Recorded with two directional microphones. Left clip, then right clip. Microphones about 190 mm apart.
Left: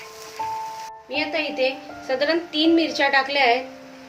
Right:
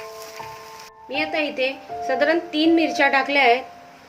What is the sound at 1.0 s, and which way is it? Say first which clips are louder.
A woman's voice: right 1 dB; 45° right (ahead or behind).